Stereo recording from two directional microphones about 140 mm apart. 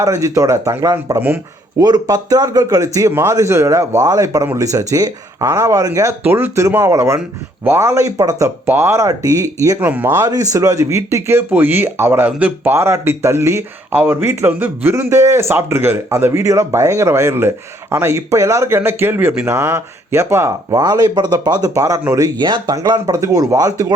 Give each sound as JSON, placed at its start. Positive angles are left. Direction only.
{"t": 0.0, "sound": "speech", "side_deg": -25}
{"t": 9.8, "sound": "speech", "side_deg": -15}
{"t": 22.4, "sound": "speech", "side_deg": -30}